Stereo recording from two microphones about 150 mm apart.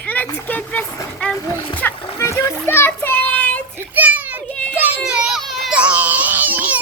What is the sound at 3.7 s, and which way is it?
Children playing, 10° right (ahead or behind).